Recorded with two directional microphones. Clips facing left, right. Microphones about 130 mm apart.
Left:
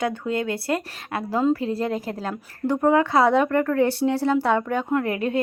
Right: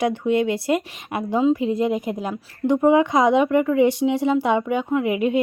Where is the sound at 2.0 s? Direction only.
15° right (ahead or behind).